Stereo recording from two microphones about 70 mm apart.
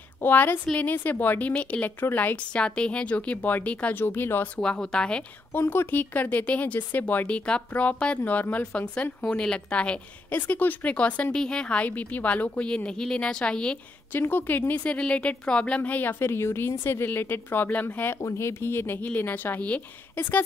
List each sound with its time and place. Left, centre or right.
0.2 s a woman's voice: left
4.0 s a woman's voice: left
4.6 s speech: centre
5.5 s a woman's voice: left; by 13.7 s centre
14.1 s a woman's voice: left